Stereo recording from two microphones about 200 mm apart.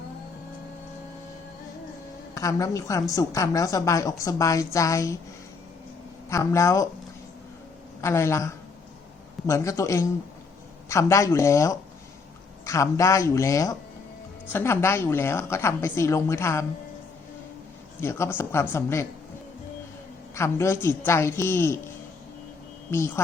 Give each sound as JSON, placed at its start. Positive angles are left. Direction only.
{"t": 2.3, "sound": "a woman's voice", "side_deg": 15}
{"t": 6.3, "sound": "a woman's voice", "side_deg": 15}
{"t": 8.0, "sound": "a woman's voice", "side_deg": 15}
{"t": 18.0, "sound": "a woman's voice", "side_deg": 10}
{"t": 20.3, "sound": "a woman's voice", "side_deg": 15}
{"t": 22.9, "sound": "a woman's voice", "side_deg": 10}